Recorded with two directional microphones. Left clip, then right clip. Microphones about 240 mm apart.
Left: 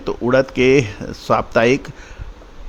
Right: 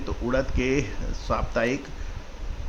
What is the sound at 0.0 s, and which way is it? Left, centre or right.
Speech, left.